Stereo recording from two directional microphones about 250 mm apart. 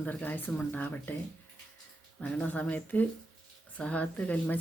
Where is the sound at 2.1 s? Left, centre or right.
Centre.